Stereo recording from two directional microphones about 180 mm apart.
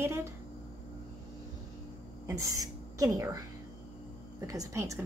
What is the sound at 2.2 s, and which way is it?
A woman's voice, 20° right (ahead or behind).